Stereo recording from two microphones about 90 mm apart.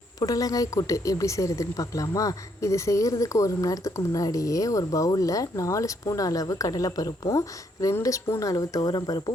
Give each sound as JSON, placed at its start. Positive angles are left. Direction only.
{"t": 0.2, "sound": "speech", "side_deg": 45}